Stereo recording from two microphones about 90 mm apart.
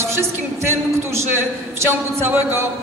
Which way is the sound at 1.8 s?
25° right (ahead or behind).